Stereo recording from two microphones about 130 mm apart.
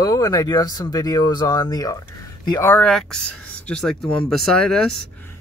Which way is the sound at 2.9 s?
5° left (ahead or behind).